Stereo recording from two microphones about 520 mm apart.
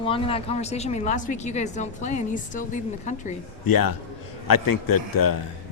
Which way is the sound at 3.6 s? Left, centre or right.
Left.